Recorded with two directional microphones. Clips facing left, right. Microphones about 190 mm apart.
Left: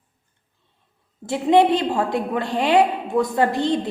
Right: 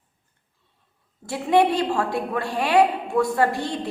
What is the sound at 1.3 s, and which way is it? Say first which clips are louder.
A woman's voice: left 3 dB; 20° left (ahead or behind).